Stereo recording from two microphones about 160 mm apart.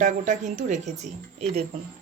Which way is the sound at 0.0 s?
50° right (ahead or behind).